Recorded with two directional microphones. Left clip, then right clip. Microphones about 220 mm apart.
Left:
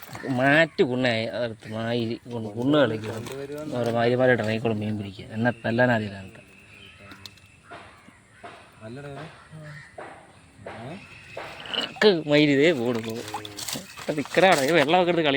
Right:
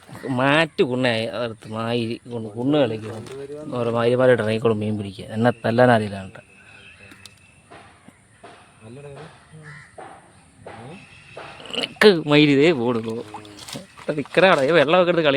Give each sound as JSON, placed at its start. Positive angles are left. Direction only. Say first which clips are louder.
{"t": 0.3, "sound": "a man's voice", "louder": "right 1 dB", "side_deg": -20}
{"t": 11.8, "sound": "a man's voice", "louder": "right 5 dB", "side_deg": -30}